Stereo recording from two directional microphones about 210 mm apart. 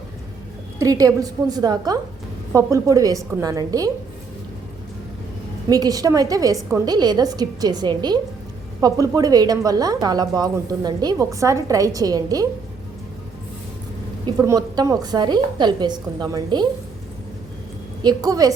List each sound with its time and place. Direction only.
0.8 s a woman's voice: 15° right (ahead or behind)
5.6 s a woman's voice: 15° right (ahead or behind)
14.3 s a woman's voice: 15° right (ahead or behind)
18.0 s a woman's voice: 15° right (ahead or behind)